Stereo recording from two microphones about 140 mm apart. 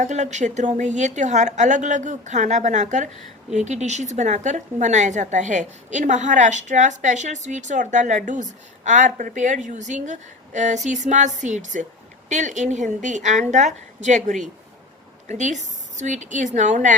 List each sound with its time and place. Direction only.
0.0 s a woman's voice: 60° right (ahead or behind)